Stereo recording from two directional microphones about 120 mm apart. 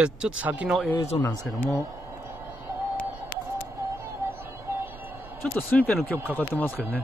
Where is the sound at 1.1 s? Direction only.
40° left (ahead or behind).